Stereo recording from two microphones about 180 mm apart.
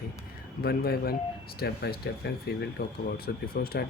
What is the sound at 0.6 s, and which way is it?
Speech, 60° left (ahead or behind).